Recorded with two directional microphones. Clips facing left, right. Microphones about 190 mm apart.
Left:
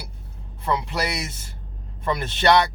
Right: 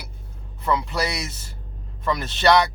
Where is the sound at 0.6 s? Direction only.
25° left (ahead or behind).